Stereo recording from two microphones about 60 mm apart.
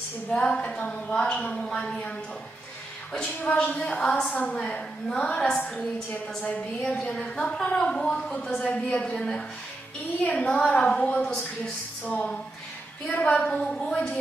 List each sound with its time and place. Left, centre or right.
0.3 s a woman's voice: centre
3.3 s a woman's voice: left
4.6 s a woman's voice: centre
7.1 s a woman's voice: centre
10.2 s a woman's voice: left
12.0 s a woman's voice: left